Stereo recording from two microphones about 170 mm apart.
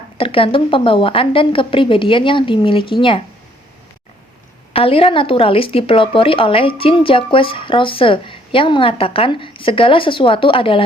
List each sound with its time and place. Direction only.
0.2 s a woman's voice: 30° left (ahead or behind)
4.7 s a woman's voice: 35° left (ahead or behind)